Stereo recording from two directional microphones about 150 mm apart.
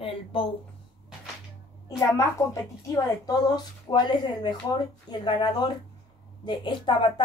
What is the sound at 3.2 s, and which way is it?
Speech, 30° left (ahead or behind).